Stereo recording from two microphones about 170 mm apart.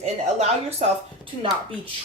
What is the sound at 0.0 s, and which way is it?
A woman's voice, 40° right (ahead or behind).